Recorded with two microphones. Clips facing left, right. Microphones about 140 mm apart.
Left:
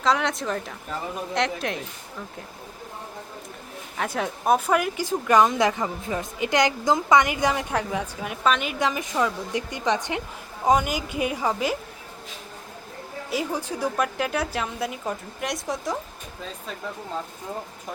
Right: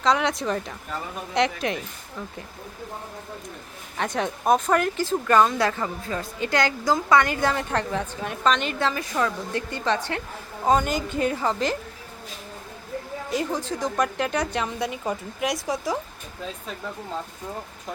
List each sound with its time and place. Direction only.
0.0 s a woman's voice: centre (ahead or behind)
3.9 s speech: 5° left (ahead or behind)
13.3 s a woman's voice: 10° left (ahead or behind)